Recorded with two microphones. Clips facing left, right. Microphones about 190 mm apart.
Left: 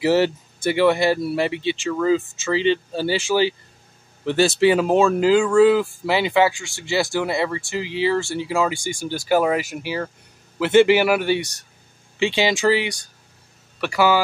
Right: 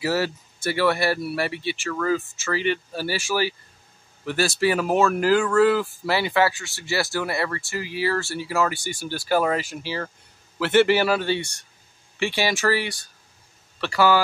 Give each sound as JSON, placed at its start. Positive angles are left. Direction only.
{"t": 0.0, "sound": "speech", "side_deg": 25}